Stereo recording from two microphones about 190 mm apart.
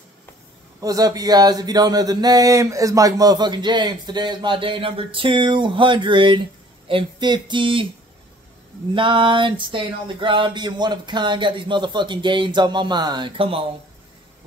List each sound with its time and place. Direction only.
0.7 s speech: 20° right (ahead or behind)
8.9 s speech: 25° right (ahead or behind)